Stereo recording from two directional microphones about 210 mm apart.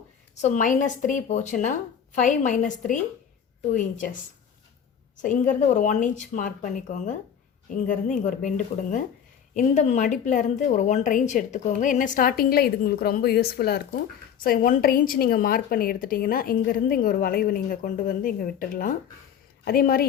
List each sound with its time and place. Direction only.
0.4 s speech: 35° left (ahead or behind)
5.2 s speech: 40° left (ahead or behind)